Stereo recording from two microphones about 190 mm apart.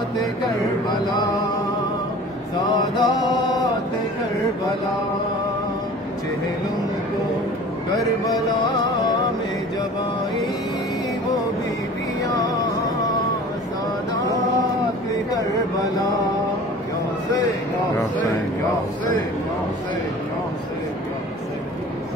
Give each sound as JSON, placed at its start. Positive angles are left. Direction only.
{"t": 3.0, "sound": "music", "side_deg": 20}